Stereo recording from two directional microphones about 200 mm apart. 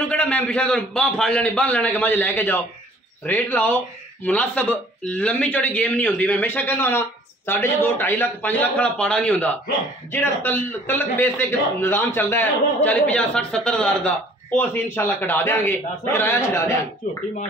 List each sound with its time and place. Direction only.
0.1 s speech: 5° left (ahead or behind)
17.0 s speech: 40° left (ahead or behind)